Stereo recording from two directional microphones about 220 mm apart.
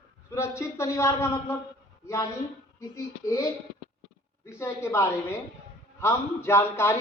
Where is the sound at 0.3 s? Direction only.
10° left (ahead or behind).